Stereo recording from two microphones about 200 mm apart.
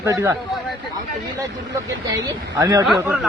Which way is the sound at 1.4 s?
15° right (ahead or behind).